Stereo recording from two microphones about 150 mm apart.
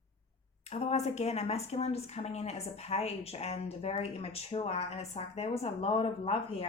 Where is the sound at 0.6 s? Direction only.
45° left (ahead or behind).